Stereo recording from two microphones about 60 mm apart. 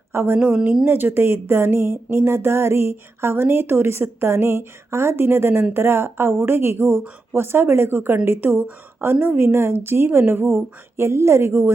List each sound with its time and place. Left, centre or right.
0.1 s a woman's voice: right
0.3 s a woman's voice: centre
0.9 s speech: right